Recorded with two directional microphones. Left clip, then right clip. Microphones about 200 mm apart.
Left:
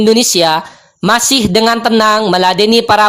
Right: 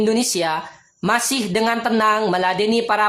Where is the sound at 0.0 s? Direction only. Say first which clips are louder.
Left 10 dB; 35° left (ahead or behind).